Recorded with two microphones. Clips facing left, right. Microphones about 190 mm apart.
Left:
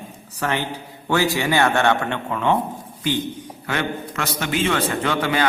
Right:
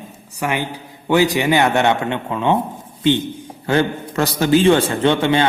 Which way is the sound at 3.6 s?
35° right (ahead or behind).